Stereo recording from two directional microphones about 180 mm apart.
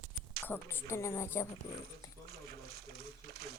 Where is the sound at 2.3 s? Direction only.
65° right (ahead or behind).